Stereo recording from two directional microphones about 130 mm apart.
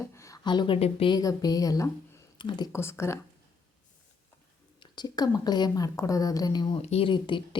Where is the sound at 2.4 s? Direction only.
35° left (ahead or behind).